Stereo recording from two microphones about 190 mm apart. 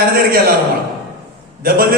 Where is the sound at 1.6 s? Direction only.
50° right (ahead or behind).